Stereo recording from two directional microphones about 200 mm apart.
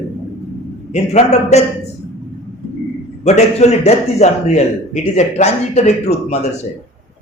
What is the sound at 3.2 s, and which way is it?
A man's voice, 35° left (ahead or behind).